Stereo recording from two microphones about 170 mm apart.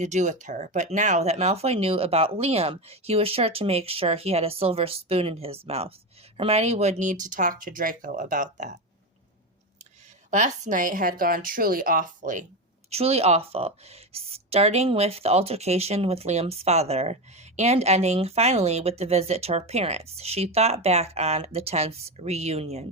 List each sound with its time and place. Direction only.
0.0 s speech: 45° right (ahead or behind)
10.3 s a woman's voice: 45° right (ahead or behind)
12.9 s speech: 35° right (ahead or behind)